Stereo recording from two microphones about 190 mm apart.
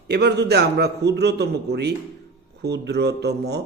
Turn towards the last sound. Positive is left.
turn(degrees=-60)  # may be behind; listen again after turning